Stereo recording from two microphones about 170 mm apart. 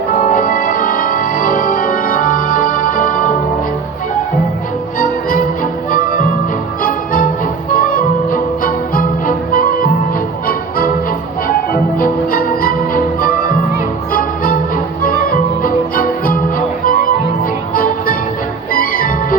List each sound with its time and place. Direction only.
0.2 s music: 50° left (ahead or behind)
4.9 s music: 55° left (ahead or behind)
11.9 s music: 55° left (ahead or behind)